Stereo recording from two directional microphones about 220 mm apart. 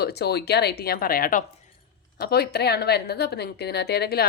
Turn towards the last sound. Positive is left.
turn(degrees=45)  # may be behind; listen again after turning